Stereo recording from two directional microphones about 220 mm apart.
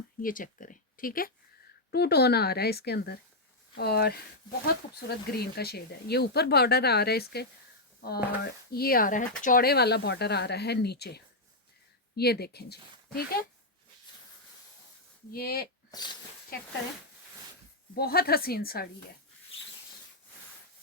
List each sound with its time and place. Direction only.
0.2 s speech: 40° left (ahead or behind)
15.3 s speech: 45° left (ahead or behind)
15.9 s speech: 20° left (ahead or behind)
16.5 s speech: 40° left (ahead or behind)
17.9 s speech: 45° left (ahead or behind)